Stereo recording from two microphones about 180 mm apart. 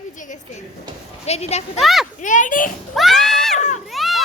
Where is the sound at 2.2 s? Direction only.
45° left (ahead or behind).